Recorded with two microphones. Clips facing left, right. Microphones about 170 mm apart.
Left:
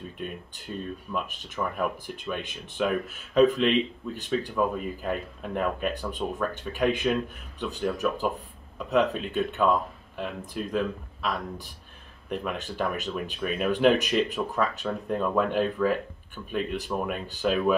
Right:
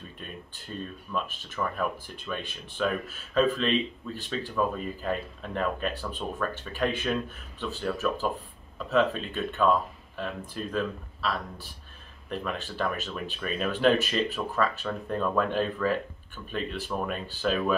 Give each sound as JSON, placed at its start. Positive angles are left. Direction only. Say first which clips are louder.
{"t": 0.7, "sound": "speech", "louder": "left 1 dB", "side_deg": 10}
{"t": 12.3, "sound": "speech", "louder": "left 2 dB", "side_deg": 15}